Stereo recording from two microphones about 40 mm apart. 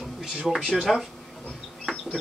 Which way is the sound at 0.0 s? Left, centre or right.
Centre.